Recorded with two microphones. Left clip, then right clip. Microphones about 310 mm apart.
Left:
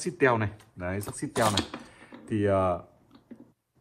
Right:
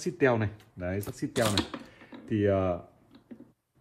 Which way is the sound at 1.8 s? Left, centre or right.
Centre.